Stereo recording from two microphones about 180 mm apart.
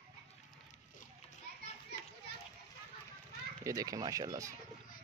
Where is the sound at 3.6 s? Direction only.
20° right (ahead or behind).